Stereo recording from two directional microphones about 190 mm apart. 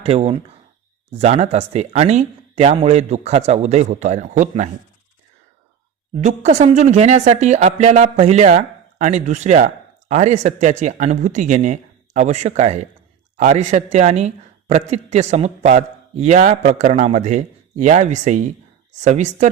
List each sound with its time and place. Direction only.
0.0 s speech: 30° right (ahead or behind)
6.1 s speech: 35° right (ahead or behind)